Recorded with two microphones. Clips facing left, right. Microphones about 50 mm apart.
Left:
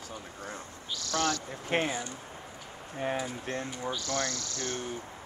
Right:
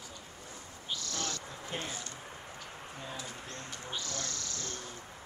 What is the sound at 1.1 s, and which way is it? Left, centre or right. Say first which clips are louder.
Speech: left 9 dB; left.